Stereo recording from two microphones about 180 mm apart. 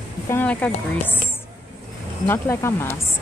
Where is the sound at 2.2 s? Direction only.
15° left (ahead or behind).